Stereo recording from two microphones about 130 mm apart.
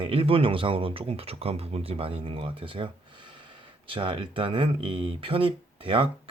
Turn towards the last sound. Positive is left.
turn(degrees=-45)  # may be behind; listen again after turning